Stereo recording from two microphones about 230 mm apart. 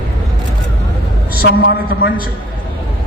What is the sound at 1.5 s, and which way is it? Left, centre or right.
Speech, left.